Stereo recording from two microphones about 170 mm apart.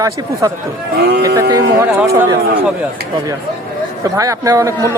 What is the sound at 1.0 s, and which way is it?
Speech, 75° right (ahead or behind).